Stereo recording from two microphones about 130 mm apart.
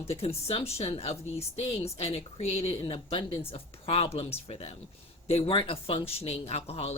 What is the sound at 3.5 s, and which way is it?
Speech, 45° left (ahead or behind).